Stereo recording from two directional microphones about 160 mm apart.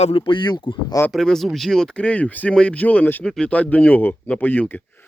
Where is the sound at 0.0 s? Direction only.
35° left (ahead or behind).